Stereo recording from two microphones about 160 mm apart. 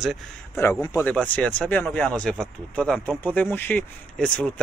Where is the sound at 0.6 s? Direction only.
15° left (ahead or behind).